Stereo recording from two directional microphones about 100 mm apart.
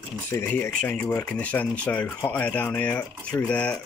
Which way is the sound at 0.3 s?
20° left (ahead or behind).